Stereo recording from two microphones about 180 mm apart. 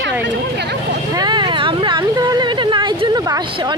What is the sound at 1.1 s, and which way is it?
Speech, 25° right (ahead or behind).